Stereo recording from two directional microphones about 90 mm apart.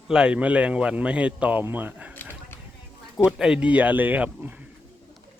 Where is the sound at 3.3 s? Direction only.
10° right (ahead or behind).